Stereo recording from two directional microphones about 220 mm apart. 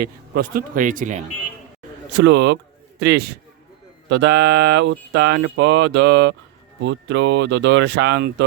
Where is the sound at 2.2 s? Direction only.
50° right (ahead or behind).